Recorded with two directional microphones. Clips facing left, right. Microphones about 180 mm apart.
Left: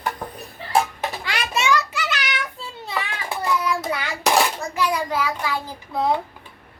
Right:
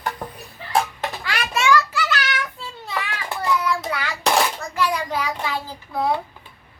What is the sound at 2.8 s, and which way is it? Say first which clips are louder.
Children playing: even; 20° left (ahead or behind).